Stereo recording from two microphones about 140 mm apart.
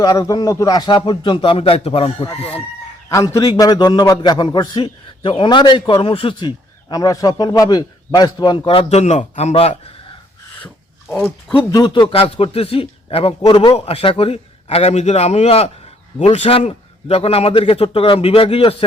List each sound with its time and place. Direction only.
0.0 s a man's voice: 25° left (ahead or behind); by 2.0 s 45° left (ahead or behind)
2.3 s chicken: 10° left (ahead or behind)
3.1 s a man's voice: 20° left (ahead or behind); by 6.5 s 40° left (ahead or behind)
6.8 s a man's voice: 25° left (ahead or behind); by 9.9 s 45° left (ahead or behind)
11.5 s a man's voice: 30° left (ahead or behind)